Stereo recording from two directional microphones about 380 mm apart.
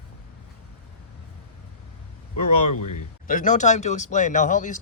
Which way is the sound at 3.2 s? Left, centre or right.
Centre.